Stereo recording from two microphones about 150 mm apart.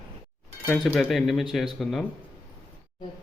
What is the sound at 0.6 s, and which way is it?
Speech, 10° left (ahead or behind).